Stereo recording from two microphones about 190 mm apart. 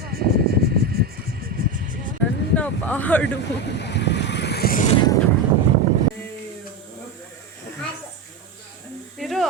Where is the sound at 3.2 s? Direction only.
65° left (ahead or behind).